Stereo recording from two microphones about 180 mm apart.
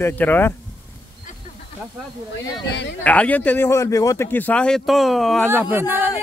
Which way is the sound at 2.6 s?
70° left (ahead or behind).